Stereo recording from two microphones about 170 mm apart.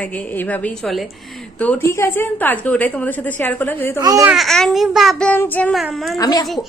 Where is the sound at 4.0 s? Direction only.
20° right (ahead or behind).